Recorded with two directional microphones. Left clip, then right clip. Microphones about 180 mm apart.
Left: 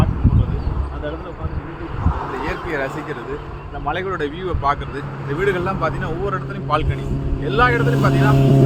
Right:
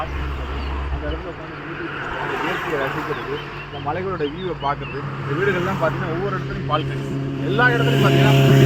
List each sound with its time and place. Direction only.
3.8 s speech: 10° left (ahead or behind)
7.9 s speech: 50° right (ahead or behind)